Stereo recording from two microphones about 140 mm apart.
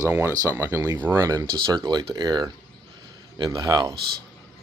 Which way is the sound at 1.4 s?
30° right (ahead or behind).